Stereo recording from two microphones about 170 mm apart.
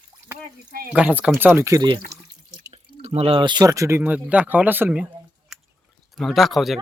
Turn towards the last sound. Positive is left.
turn(degrees=0)  # may be behind; listen again after turning